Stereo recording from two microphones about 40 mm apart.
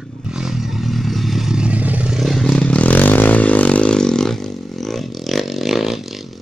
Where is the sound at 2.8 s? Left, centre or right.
Left.